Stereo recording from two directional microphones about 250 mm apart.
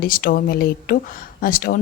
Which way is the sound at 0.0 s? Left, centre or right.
Left.